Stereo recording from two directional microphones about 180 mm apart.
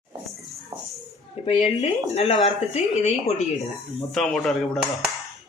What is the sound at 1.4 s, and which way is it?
Speech, 30° left (ahead or behind).